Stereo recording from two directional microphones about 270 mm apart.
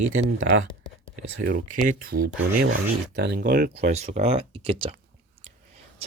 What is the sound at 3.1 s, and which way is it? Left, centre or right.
Speech, right.